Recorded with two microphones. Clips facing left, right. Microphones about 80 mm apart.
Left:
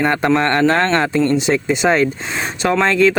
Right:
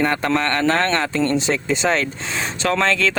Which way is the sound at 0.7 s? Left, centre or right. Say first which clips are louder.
Left 4 dB; centre.